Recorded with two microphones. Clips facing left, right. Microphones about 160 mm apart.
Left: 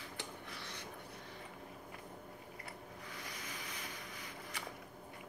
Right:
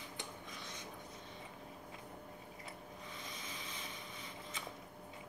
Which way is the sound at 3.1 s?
25° right (ahead or behind).